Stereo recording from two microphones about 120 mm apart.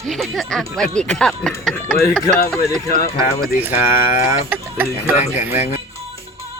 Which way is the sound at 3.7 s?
65° left (ahead or behind).